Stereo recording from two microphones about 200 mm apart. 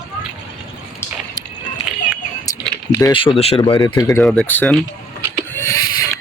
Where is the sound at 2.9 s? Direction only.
20° left (ahead or behind).